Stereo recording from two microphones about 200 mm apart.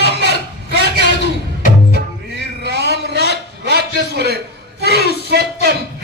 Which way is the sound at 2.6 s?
55° right (ahead or behind).